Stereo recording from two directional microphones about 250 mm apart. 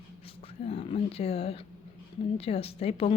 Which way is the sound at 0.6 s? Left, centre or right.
Left.